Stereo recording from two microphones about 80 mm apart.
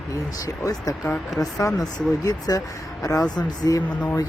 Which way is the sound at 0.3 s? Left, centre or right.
Left.